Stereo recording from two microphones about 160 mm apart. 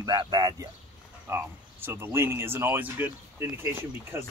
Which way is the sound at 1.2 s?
15° right (ahead or behind).